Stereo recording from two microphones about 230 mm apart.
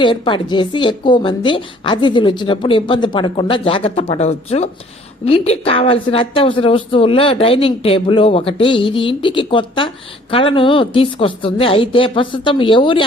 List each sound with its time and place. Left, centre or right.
0.0 s a woman's voice: left